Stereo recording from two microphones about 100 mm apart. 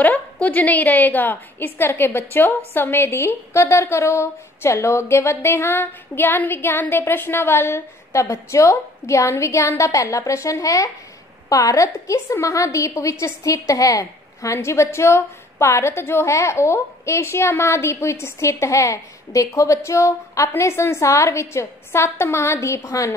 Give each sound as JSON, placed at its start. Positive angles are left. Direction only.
{"t": 0.0, "sound": "a woman's voice", "side_deg": 15}